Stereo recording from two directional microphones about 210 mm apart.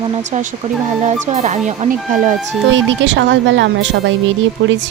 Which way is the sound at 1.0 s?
35° right (ahead or behind).